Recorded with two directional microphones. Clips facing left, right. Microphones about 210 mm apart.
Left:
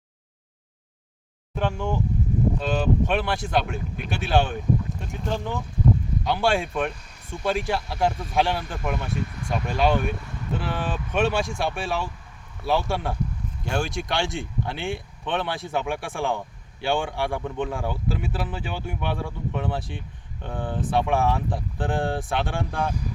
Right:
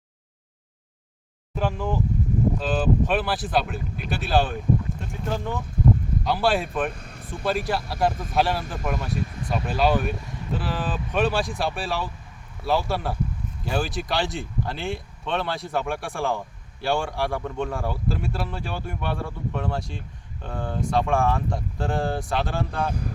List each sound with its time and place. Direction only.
1.5 s speech: 5° right (ahead or behind)
6.9 s vehicle: 55° right (ahead or behind)
7.3 s speech: centre (ahead or behind)